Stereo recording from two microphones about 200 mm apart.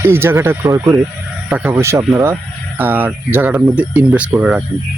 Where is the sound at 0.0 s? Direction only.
10° right (ahead or behind).